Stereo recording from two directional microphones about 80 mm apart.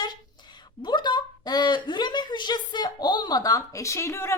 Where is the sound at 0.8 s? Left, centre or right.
Left.